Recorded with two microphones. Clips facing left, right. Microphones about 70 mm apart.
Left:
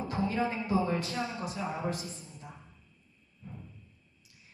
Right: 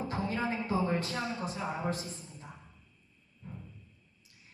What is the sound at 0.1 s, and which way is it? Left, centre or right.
A woman's voice, right.